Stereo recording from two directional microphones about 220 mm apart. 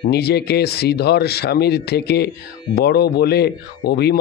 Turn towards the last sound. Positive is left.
turn(degrees=50)  # may be behind; listen again after turning